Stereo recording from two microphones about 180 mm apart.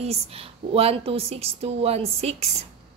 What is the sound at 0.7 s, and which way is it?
A woman's voice, 35° right (ahead or behind).